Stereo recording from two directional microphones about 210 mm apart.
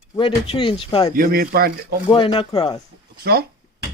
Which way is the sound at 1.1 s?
45° right (ahead or behind).